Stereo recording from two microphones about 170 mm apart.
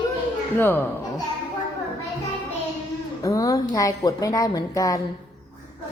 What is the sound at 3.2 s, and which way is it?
A woman's voice, 20° left (ahead or behind).